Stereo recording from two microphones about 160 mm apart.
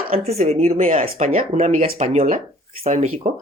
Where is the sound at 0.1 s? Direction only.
40° right (ahead or behind).